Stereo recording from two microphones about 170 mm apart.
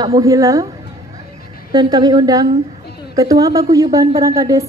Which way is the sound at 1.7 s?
25° right (ahead or behind).